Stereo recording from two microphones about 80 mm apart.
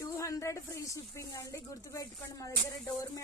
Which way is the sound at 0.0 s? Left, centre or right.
Left.